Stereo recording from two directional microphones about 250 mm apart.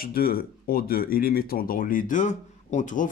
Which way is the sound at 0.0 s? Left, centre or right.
Left.